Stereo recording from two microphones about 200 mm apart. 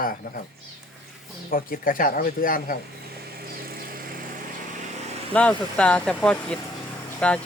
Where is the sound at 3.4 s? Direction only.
50° right (ahead or behind).